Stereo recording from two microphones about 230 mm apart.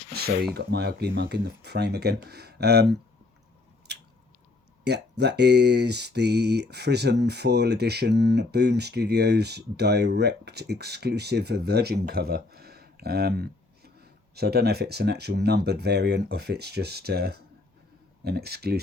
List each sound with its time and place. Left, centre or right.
0.1 s a sound: right
0.5 s speech: right
3.9 s biting: right
4.8 s speech: right